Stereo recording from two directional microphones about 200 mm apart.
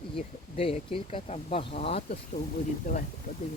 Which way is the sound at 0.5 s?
30° left (ahead or behind).